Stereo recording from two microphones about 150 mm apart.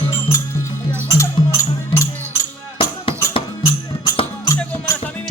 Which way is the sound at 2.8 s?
35° left (ahead or behind).